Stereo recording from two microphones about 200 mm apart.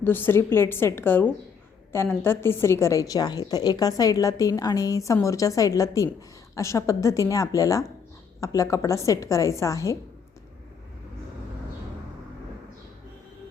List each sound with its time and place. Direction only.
0.0 s a woman's voice: 10° left (ahead or behind)